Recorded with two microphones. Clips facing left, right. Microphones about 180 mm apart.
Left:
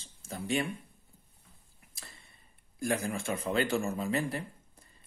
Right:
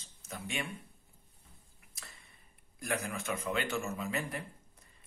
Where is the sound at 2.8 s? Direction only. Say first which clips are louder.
Left 5 dB; 30° left (ahead or behind).